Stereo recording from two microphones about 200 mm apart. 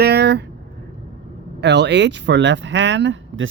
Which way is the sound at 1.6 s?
60° right (ahead or behind).